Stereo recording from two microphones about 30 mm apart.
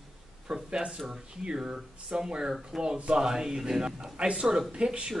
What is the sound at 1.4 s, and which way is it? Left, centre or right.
Speech, right.